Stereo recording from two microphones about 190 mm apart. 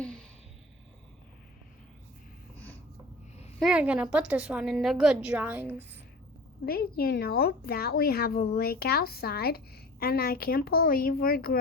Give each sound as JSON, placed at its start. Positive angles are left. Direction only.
{"t": 0.0, "sound": "a sound", "side_deg": 5}
{"t": 3.6, "sound": "a woman's voice", "side_deg": -5}
{"t": 6.7, "sound": "a woman's voice", "side_deg": 55}